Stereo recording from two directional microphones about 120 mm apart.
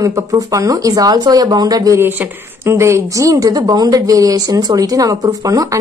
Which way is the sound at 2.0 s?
15° right (ahead or behind).